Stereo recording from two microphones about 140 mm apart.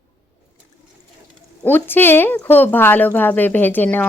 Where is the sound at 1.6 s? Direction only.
15° left (ahead or behind).